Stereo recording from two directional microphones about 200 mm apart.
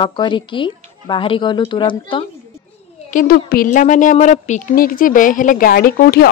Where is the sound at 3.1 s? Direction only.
50° left (ahead or behind).